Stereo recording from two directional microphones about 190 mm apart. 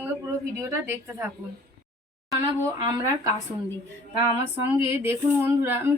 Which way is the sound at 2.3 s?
15° right (ahead or behind).